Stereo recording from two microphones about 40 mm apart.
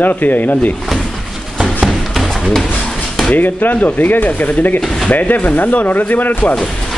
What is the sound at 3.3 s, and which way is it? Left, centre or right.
Speech, left.